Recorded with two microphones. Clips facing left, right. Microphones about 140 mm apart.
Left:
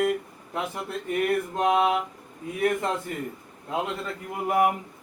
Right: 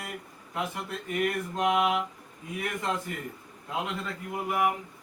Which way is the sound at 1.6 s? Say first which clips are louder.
Left 2 dB; 30° left (ahead or behind).